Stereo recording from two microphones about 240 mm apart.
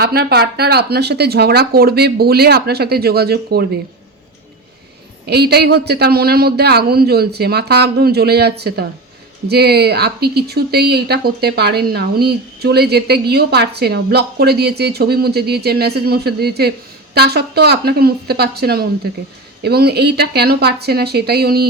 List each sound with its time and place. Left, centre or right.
0.0 s a woman's voice: right
5.2 s a woman's voice: right